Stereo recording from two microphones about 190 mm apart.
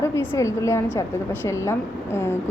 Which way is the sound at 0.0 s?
15° left (ahead or behind).